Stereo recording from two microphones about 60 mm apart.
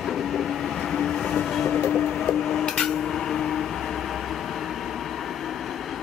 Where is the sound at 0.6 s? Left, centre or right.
Centre.